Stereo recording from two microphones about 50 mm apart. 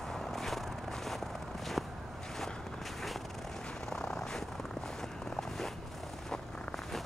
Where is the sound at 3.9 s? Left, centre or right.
Centre.